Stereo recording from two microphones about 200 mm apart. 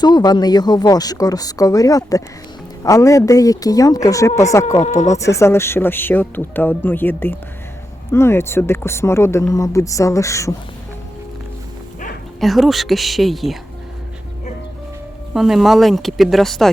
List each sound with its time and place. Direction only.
0.0 s speech: 20° left (ahead or behind)
12.4 s speech: centre (ahead or behind)
15.3 s speech: centre (ahead or behind)